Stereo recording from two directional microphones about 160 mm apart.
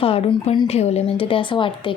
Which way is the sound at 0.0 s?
35° left (ahead or behind).